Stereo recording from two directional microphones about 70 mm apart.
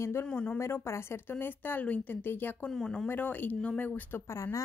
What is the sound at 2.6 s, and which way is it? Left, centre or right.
Speech, centre.